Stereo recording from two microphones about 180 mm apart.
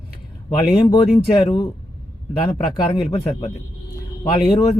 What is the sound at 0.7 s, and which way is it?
Speech, 30° left (ahead or behind).